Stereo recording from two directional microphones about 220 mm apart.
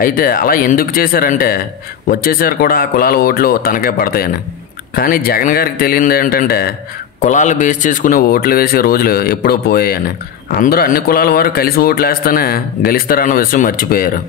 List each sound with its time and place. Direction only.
0.0 s a man's voice: 40° left (ahead or behind)